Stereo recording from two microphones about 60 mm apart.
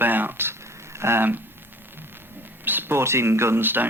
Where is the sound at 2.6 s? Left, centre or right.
Right.